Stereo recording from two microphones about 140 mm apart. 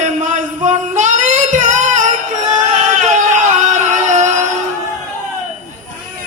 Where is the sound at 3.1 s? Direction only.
60° right (ahead or behind).